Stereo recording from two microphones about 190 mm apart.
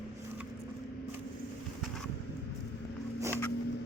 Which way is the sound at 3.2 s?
15° right (ahead or behind).